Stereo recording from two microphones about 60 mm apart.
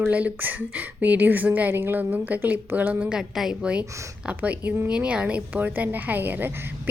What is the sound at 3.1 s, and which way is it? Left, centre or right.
Speech, centre.